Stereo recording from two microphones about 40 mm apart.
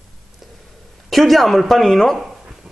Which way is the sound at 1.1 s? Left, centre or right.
Centre.